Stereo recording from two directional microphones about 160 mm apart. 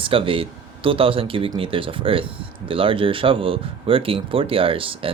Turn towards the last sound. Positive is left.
turn(degrees=-35)  # may be behind; listen again after turning